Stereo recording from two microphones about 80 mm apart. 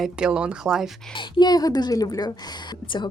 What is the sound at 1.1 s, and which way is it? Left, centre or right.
A woman's voice, left.